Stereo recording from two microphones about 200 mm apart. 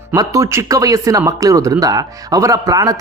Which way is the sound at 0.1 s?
15° right (ahead or behind).